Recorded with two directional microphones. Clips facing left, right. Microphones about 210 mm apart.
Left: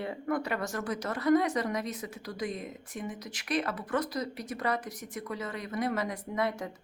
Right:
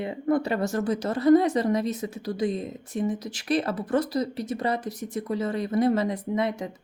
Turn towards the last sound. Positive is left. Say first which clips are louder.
# right 5 dB
turn(degrees=-20)  # may be behind; listen again after turning